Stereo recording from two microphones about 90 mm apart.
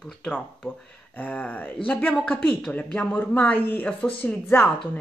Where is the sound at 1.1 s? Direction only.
20° left (ahead or behind).